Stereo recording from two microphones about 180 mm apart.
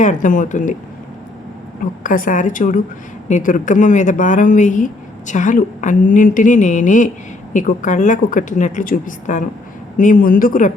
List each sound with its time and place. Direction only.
0.0 s speech: 45° left (ahead or behind)
1.8 s speech: 50° left (ahead or behind)